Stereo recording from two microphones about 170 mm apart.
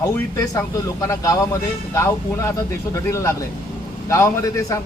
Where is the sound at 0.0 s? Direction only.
20° left (ahead or behind).